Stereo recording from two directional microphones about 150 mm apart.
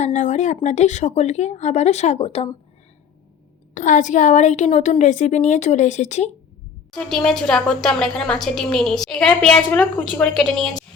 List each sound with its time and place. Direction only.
0.0 s a woman's voice: 55° left (ahead or behind)
3.8 s a woman's voice: 55° left (ahead or behind)
6.9 s a woman's voice: 5° left (ahead or behind)